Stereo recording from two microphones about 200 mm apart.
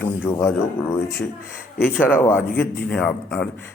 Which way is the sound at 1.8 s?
10° left (ahead or behind).